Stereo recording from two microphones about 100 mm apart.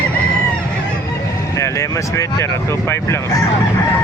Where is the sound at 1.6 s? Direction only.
30° left (ahead or behind).